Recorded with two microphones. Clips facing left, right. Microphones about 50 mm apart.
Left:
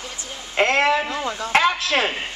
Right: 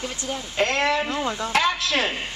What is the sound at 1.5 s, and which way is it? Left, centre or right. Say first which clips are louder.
Speech: left 5 dB; left.